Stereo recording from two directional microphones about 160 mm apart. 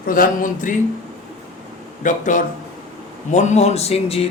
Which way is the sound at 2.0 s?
55° left (ahead or behind).